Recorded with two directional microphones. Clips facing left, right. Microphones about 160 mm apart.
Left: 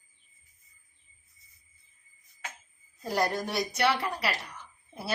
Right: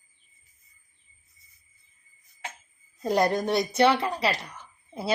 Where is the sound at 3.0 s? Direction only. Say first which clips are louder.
Right 6 dB; 20° right (ahead or behind).